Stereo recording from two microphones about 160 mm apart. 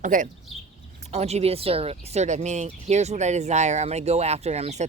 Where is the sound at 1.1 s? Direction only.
40° right (ahead or behind).